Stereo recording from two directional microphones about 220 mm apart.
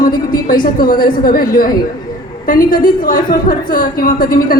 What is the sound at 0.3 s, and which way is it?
A woman's voice, 40° left (ahead or behind).